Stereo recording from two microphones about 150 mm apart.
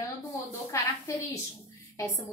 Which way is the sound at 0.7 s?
20° left (ahead or behind).